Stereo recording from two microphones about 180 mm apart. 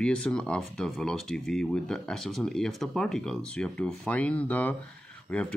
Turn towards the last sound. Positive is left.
turn(degrees=10)  # may be behind; listen again after turning